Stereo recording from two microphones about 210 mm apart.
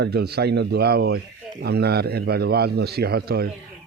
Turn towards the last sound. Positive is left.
turn(degrees=-50)  # may be behind; listen again after turning